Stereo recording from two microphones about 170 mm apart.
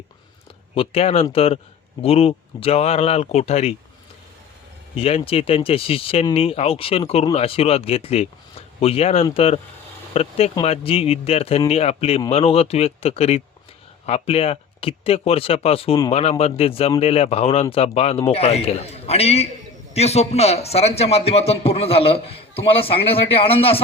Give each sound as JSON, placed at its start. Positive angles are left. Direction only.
{"t": 0.7, "sound": "a man's voice", "side_deg": 35}
{"t": 4.9, "sound": "a man's voice", "side_deg": 35}